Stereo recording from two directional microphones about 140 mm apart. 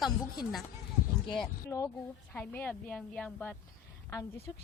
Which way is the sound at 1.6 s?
20° left (ahead or behind).